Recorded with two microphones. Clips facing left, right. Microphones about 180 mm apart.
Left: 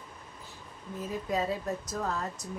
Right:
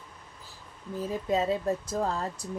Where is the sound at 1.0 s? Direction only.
25° right (ahead or behind).